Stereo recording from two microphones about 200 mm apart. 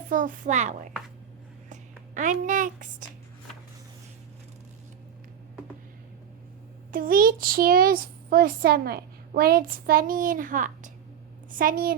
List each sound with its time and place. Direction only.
0.1 s a child's voice: 40° right (ahead or behind)
6.9 s a child's voice: 45° right (ahead or behind)